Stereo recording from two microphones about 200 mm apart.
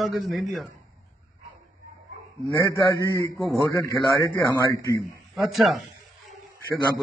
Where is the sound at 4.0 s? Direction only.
Centre (ahead or behind).